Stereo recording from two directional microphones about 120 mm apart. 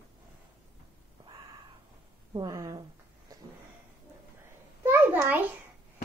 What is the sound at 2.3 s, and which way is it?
Speech, 30° right (ahead or behind).